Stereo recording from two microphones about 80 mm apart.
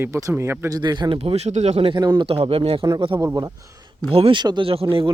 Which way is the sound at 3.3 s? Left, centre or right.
Right.